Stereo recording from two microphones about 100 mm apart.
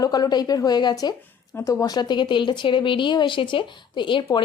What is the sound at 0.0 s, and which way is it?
Speech, 40° left (ahead or behind).